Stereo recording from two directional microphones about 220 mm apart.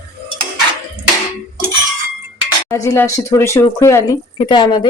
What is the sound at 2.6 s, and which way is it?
Speech, 15° left (ahead or behind).